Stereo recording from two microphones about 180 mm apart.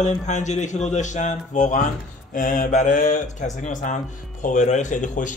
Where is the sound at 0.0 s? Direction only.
40° left (ahead or behind).